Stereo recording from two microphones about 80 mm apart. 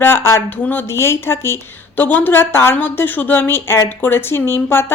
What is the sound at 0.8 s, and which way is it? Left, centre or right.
Speech, left.